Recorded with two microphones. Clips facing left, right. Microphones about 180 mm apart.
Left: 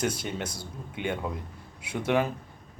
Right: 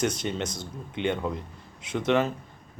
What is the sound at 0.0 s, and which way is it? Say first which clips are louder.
A man's voice: right 2 dB; 5° left (ahead or behind).